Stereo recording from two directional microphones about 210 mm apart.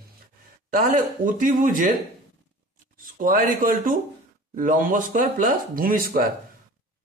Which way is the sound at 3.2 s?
40° right (ahead or behind).